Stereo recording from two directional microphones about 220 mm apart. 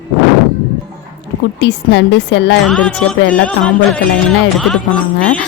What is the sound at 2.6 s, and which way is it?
Speech, 5° left (ahead or behind).